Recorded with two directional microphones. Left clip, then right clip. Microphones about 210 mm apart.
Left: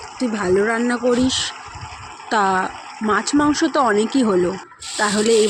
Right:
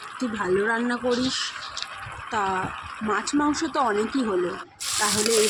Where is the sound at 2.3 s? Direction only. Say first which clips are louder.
Left 8 dB; 35° left (ahead or behind).